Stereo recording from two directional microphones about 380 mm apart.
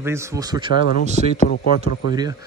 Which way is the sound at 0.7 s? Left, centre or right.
Left.